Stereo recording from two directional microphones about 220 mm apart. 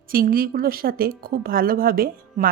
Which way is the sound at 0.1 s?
40° right (ahead or behind).